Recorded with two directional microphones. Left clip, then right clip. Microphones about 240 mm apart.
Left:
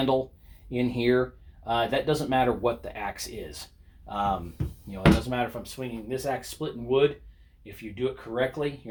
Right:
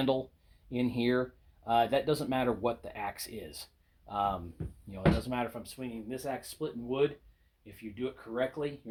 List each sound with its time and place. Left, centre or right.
0.7 s speech: right